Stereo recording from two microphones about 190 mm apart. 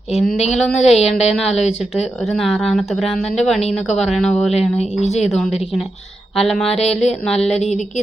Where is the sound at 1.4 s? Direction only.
35° left (ahead or behind).